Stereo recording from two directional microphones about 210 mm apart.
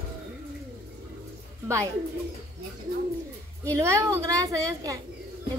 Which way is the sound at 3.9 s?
15° right (ahead or behind).